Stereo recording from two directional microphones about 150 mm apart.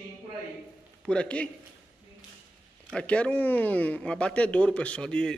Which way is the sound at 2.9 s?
5° left (ahead or behind).